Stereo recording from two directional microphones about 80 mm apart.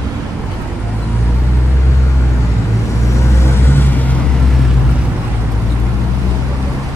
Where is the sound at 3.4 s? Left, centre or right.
Left.